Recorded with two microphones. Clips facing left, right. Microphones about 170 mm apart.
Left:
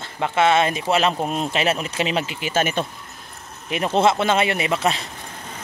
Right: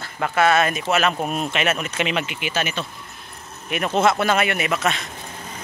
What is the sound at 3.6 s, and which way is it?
Speech, 25° left (ahead or behind).